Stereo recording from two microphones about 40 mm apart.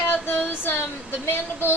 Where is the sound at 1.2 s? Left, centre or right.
Left.